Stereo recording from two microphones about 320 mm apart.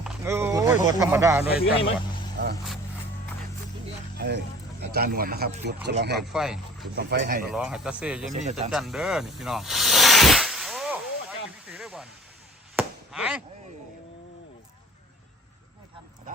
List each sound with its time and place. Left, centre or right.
0.0 s a sound: centre
1.0 s speech: centre
1.8 s a sound: centre
4.2 s speech: right
6.1 s speech: centre
6.9 s speech: right
7.4 s speech: centre
8.3 s speech: right
8.7 s snake: centre
12.7 s chop: centre